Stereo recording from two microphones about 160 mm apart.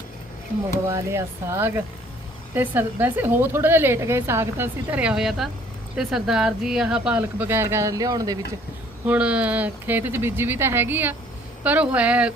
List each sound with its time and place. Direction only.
0.9 s a woman's voice: 15° right (ahead or behind)
9.0 s a woman's voice: 5° right (ahead or behind)